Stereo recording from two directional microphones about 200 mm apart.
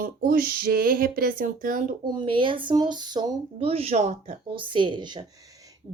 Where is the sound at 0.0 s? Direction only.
50° right (ahead or behind).